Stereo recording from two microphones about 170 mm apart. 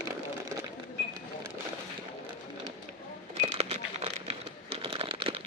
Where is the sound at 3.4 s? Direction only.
35° right (ahead or behind).